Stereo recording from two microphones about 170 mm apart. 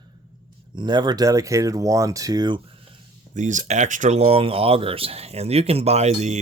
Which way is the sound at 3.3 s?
45° right (ahead or behind).